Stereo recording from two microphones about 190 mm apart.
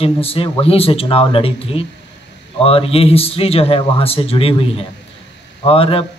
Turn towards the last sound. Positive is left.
turn(degrees=30)  # may be behind; listen again after turning